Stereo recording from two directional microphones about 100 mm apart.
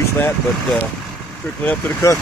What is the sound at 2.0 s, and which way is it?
Speech, 30° left (ahead or behind).